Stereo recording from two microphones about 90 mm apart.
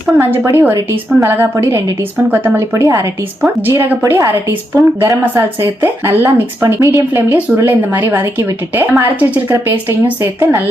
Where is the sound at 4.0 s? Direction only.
35° right (ahead or behind).